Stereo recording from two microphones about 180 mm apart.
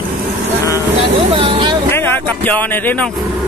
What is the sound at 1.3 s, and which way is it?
Speech, 30° right (ahead or behind).